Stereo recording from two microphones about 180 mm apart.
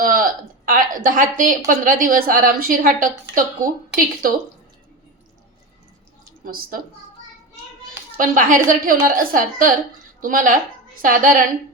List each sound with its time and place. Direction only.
0.0 s a woman's voice: 50° right (ahead or behind)
6.4 s a woman's voice: 55° right (ahead or behind)
8.1 s a woman's voice: 50° right (ahead or behind)